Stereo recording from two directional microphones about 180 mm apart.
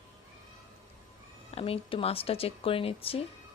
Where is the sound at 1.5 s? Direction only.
30° left (ahead or behind).